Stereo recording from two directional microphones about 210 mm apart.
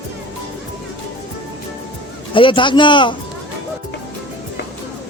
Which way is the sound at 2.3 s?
25° left (ahead or behind).